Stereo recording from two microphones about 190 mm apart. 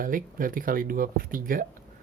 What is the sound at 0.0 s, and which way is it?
Speech, 45° right (ahead or behind).